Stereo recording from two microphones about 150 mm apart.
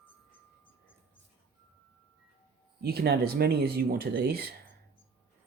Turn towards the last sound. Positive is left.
turn(degrees=-90)